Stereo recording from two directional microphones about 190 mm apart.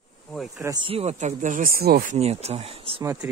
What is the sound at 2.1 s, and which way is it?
Speech, 35° right (ahead or behind).